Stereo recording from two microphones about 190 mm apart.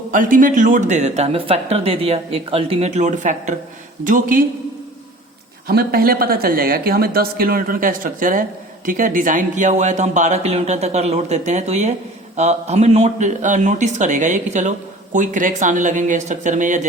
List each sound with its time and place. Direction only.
0.1 s speech: 45° right (ahead or behind)
5.6 s speech: 55° right (ahead or behind)